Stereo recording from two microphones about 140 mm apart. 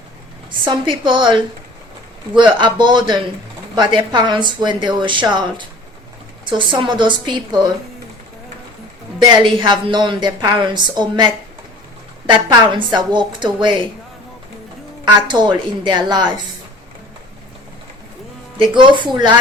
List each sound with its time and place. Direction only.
0.6 s speech: 35° right (ahead or behind)
9.1 s speech: 35° right (ahead or behind)
15.0 s speech: 35° right (ahead or behind)
18.6 s speech: 35° right (ahead or behind)